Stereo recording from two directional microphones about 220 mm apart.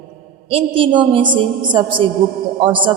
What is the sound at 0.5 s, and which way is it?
A woman's voice, 25° right (ahead or behind).